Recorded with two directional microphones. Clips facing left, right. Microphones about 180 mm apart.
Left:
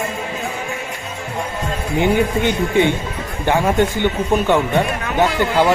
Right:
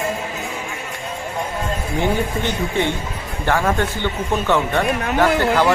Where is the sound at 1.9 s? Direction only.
15° left (ahead or behind).